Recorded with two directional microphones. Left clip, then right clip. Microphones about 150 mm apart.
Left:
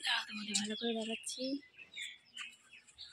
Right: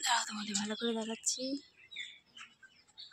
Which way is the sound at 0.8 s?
10° right (ahead or behind).